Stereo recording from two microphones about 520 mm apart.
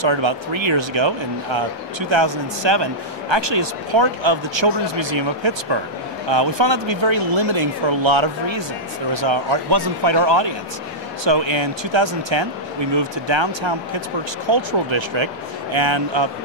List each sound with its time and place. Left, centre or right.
0.0 s speech: right